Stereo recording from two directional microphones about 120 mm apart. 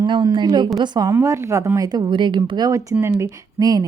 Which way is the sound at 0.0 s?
35° right (ahead or behind).